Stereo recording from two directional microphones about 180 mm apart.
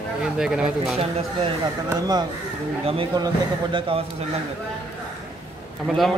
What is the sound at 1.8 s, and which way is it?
A man's voice, 20° right (ahead or behind).